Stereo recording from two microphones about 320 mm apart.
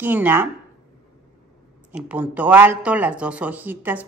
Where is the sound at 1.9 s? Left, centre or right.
Centre.